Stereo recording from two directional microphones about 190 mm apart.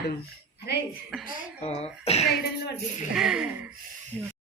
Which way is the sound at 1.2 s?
45° left (ahead or behind).